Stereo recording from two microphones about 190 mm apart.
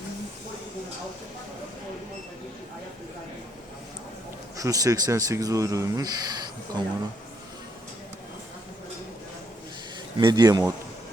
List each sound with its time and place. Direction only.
4.5 s speech: 15° right (ahead or behind)
10.2 s speech: 20° right (ahead or behind)